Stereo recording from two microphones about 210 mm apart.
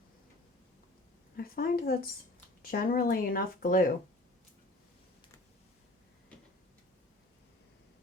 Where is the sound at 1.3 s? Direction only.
45° left (ahead or behind).